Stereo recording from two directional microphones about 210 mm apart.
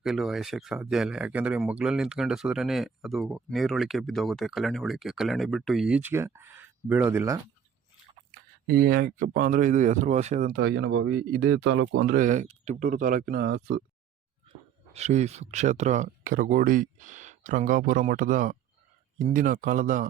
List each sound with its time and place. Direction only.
0.0 s speech: centre (ahead or behind)
8.4 s speech: 45° right (ahead or behind)
10.5 s speech: 55° right (ahead or behind)
11.5 s speech: 65° right (ahead or behind)
12.1 s speech: 35° right (ahead or behind)
14.9 s speech: 30° right (ahead or behind)